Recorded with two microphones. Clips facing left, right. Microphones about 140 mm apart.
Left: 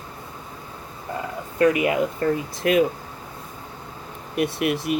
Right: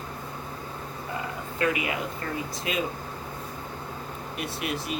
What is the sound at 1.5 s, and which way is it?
Speech, 50° left (ahead or behind).